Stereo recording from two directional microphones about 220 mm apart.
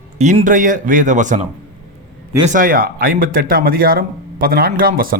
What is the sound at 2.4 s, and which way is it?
A man's voice, 35° right (ahead or behind).